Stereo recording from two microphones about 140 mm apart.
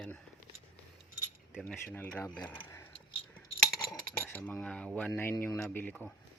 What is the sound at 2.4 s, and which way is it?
Keys jangling, 15° left (ahead or behind).